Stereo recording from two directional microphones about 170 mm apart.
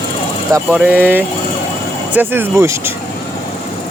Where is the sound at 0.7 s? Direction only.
10° right (ahead or behind).